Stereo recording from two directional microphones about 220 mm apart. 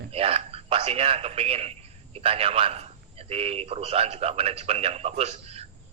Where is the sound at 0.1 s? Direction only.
25° right (ahead or behind).